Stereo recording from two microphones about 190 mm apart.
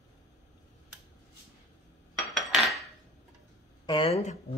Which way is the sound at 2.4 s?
Centre (ahead or behind).